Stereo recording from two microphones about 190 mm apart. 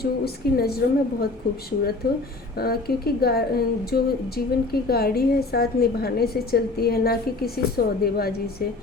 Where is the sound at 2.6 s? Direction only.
55° left (ahead or behind).